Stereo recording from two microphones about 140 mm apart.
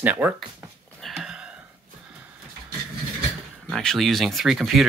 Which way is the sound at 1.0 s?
5° right (ahead or behind).